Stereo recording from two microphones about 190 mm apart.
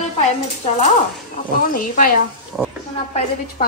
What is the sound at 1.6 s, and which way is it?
Speech, 45° left (ahead or behind).